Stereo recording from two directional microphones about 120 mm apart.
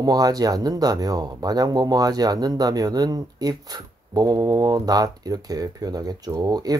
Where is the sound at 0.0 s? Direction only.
30° right (ahead or behind).